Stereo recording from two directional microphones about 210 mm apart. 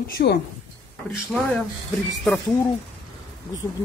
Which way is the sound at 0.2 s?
45° left (ahead or behind).